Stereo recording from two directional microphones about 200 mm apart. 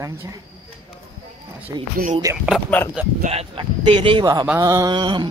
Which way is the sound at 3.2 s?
30° right (ahead or behind).